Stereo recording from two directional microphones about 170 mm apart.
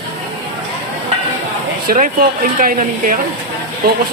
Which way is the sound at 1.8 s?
55° right (ahead or behind).